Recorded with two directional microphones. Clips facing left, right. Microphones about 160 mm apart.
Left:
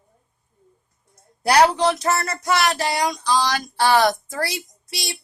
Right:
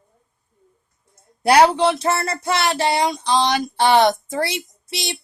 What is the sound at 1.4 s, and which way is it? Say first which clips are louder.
Speech: right 2 dB; 25° right (ahead or behind).